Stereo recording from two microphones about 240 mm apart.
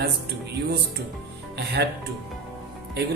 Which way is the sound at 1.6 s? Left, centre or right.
Right.